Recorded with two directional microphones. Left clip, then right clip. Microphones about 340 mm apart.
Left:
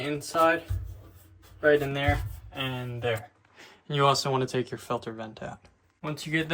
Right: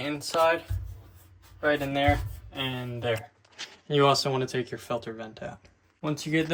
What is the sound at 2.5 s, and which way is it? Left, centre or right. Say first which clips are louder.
Speech: right 1 dB; centre.